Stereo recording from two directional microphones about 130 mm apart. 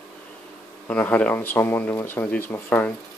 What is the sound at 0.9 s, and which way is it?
Speech, 10° left (ahead or behind).